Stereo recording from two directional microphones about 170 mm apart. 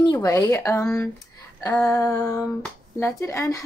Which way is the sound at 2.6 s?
5° left (ahead or behind).